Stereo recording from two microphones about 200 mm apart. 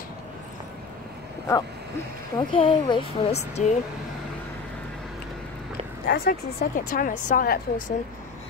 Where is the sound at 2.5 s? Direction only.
25° left (ahead or behind).